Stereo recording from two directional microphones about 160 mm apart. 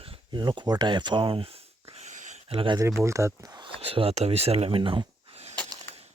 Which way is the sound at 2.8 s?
20° right (ahead or behind).